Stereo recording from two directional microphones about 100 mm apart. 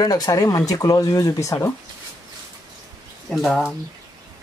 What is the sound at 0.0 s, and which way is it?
Speech, 40° left (ahead or behind).